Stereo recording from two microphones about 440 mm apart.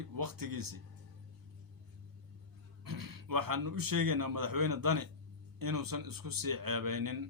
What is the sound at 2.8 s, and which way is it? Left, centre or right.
A man's voice, right.